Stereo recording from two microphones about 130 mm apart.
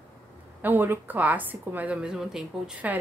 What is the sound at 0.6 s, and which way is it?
A woman's voice, 15° right (ahead or behind).